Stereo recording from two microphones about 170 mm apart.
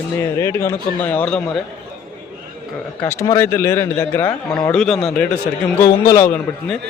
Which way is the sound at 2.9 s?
15° left (ahead or behind).